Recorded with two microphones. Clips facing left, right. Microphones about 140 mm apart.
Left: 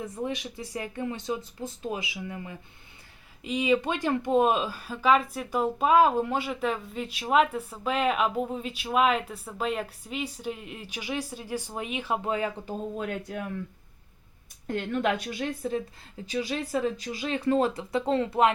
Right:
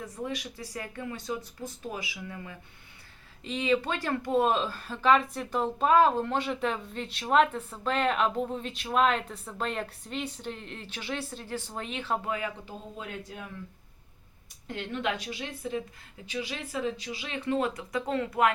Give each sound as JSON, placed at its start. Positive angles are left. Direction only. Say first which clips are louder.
{"t": 0.0, "sound": "speech", "louder": "left 3 dB", "side_deg": 25}
{"t": 12.6, "sound": "speech", "louder": "left 8 dB", "side_deg": 55}
{"t": 14.7, "sound": "a woman's voice", "louder": "left 5 dB", "side_deg": 45}